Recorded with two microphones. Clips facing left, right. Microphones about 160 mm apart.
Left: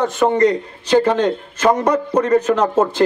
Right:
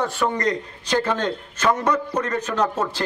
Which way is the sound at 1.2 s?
15° left (ahead or behind).